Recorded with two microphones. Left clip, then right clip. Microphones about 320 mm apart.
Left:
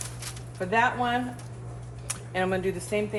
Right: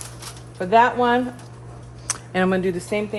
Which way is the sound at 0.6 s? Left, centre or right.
Right.